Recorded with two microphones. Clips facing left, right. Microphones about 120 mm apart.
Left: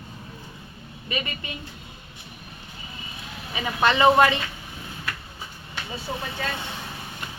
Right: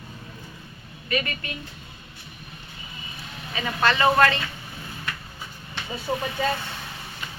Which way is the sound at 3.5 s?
15° left (ahead or behind).